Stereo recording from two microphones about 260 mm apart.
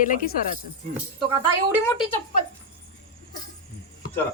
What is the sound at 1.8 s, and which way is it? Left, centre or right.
Speech, centre.